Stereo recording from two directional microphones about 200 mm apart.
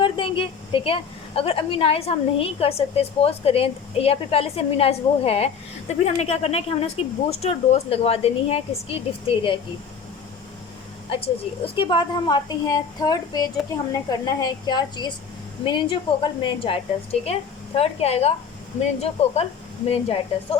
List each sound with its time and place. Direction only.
0.0 s a woman's voice: 25° left (ahead or behind)
11.1 s a woman's voice: 25° left (ahead or behind)